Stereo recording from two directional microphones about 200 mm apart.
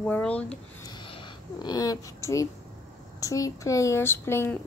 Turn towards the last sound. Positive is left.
turn(degrees=10)  # may be behind; listen again after turning